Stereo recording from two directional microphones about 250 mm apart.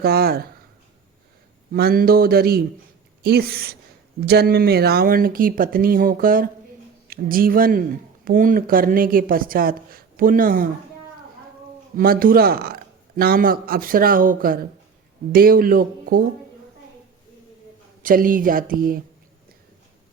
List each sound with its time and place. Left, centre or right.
0.0 s speech: right
1.7 s speech: right
11.9 s speech: right
18.0 s speech: right